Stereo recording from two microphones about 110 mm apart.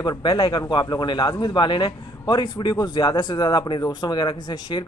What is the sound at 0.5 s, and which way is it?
Speech, 40° left (ahead or behind).